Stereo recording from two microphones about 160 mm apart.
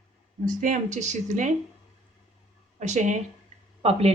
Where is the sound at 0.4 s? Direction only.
55° right (ahead or behind).